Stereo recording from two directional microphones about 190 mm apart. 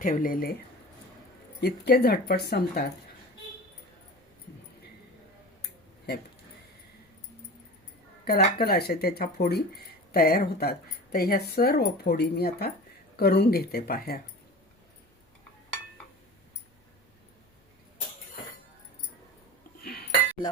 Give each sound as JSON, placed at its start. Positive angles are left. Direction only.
{"t": 0.0, "sound": "speech", "side_deg": 45}
{"t": 1.6, "sound": "speech", "side_deg": 60}
{"t": 8.2, "sound": "speech", "side_deg": 55}
{"t": 19.8, "sound": "cutlery", "side_deg": 55}